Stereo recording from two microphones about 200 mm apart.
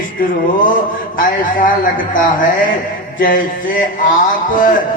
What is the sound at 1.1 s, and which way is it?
Speech, 45° left (ahead or behind).